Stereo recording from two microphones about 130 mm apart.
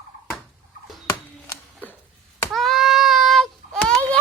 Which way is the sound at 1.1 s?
20° left (ahead or behind).